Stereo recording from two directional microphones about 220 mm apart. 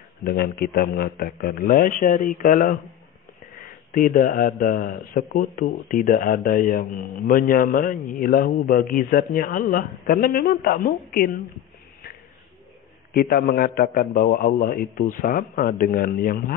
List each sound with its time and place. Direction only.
0.2 s a man's voice: 45° left (ahead or behind)
3.9 s a man's voice: 40° left (ahead or behind)
13.1 s a man's voice: 45° left (ahead or behind)